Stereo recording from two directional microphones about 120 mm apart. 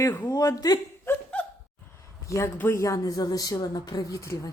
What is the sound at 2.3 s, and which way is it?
Speech, 25° left (ahead or behind).